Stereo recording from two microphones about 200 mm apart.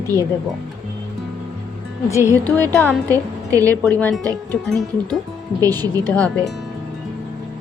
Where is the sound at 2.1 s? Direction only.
15° left (ahead or behind).